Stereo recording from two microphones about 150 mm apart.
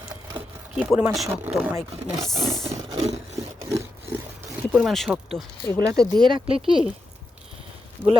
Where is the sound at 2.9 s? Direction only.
45° right (ahead or behind).